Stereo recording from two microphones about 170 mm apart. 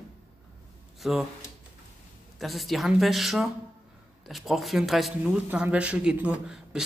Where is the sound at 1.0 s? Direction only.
Centre (ahead or behind).